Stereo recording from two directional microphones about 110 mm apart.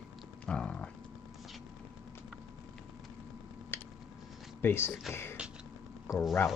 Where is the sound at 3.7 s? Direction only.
20° left (ahead or behind).